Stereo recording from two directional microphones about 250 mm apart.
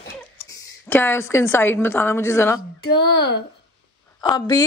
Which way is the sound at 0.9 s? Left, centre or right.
Centre.